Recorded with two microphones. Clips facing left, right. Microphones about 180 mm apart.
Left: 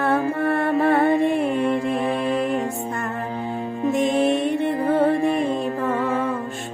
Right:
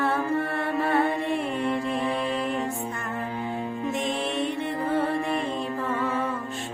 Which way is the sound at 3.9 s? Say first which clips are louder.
Left 12 dB; 45° left (ahead or behind).